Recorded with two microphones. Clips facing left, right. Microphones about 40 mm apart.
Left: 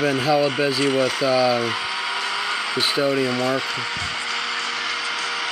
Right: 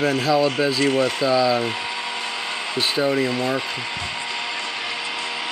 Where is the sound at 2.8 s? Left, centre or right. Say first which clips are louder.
Right 1 dB; centre.